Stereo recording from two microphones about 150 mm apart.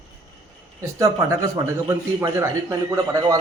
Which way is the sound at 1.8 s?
20° right (ahead or behind).